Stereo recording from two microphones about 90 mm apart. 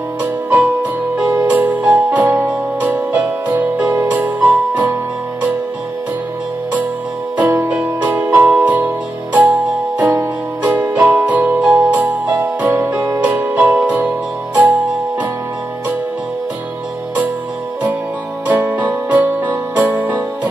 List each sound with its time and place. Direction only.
0.2 s music: 15° right (ahead or behind)
7.3 s music: 20° right (ahead or behind)
8.3 s music: 30° right (ahead or behind)
8.6 s music: 15° right (ahead or behind)
18.5 s music: 20° right (ahead or behind)